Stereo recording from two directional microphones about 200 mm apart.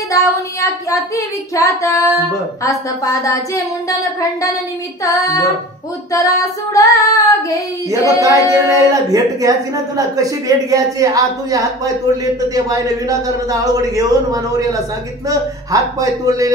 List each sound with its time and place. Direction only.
0.1 s child singing: 15° left (ahead or behind)
5.0 s child singing: 15° left (ahead or behind)
8.2 s a woman's voice: 15° right (ahead or behind)